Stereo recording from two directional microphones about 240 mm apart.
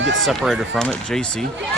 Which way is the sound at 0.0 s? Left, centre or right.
Right.